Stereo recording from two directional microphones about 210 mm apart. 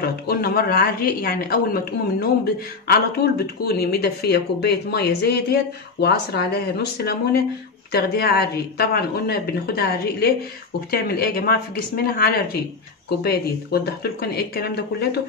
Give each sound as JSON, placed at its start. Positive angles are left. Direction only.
{"t": 0.0, "sound": "speech", "side_deg": 45}